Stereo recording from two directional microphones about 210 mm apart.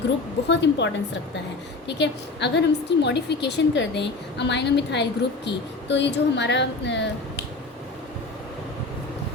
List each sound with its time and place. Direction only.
0.4 s a woman's voice: 55° left (ahead or behind)